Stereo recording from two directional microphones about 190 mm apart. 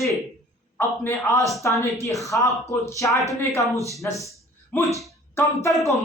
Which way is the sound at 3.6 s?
15° right (ahead or behind).